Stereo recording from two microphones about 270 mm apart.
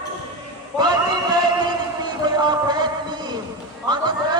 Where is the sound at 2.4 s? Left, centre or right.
Centre.